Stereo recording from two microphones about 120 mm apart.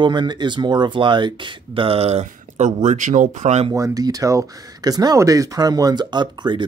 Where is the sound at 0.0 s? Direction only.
40° right (ahead or behind); by 3.6 s 80° right.